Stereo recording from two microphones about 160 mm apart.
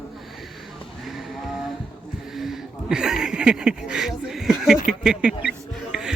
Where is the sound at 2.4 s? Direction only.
5° right (ahead or behind).